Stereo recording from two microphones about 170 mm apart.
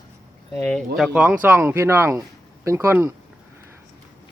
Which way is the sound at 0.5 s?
5° left (ahead or behind).